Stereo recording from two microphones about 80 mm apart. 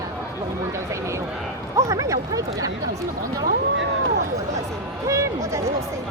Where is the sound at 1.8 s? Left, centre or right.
Right.